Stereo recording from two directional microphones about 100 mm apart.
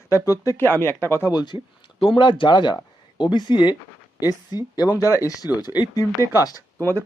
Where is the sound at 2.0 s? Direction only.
60° left (ahead or behind); by 6.6 s 40° left (ahead or behind).